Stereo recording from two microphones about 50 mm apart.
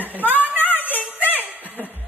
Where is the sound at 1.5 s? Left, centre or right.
Right.